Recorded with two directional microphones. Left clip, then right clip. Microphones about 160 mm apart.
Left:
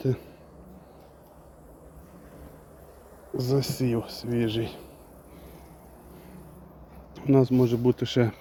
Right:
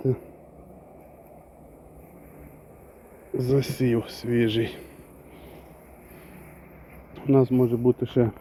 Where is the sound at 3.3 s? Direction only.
5° left (ahead or behind).